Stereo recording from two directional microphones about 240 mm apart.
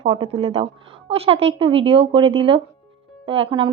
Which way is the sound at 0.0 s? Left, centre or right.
Right.